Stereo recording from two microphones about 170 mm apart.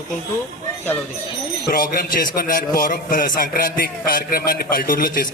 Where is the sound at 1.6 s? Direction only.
60° left (ahead or behind).